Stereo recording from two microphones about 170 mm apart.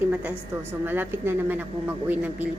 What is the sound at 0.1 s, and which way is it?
A woman's voice, 10° right (ahead or behind).